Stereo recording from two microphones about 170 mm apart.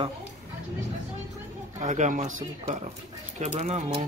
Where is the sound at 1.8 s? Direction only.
50° right (ahead or behind).